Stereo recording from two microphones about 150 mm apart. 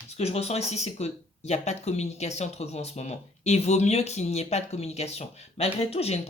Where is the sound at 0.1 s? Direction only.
45° left (ahead or behind).